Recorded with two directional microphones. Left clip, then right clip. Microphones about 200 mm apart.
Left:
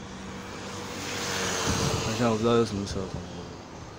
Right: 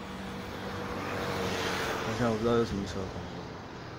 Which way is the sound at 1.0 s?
40° left (ahead or behind).